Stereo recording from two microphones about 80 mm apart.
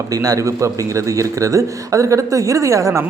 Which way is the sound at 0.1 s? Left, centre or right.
Right.